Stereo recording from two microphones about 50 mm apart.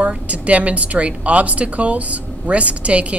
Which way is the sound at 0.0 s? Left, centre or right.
Right.